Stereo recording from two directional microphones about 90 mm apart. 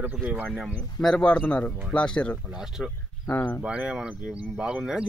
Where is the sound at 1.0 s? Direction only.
5° left (ahead or behind).